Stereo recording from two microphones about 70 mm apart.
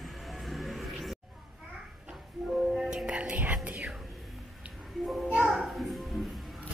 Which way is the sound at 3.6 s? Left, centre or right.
Centre.